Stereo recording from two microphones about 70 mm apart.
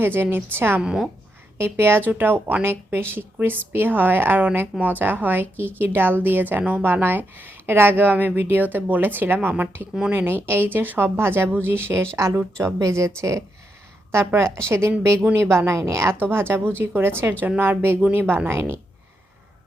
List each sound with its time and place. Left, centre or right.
0.0 s a woman's voice: right
0.8 s a woman's voice: centre
1.5 s a woman's voice: right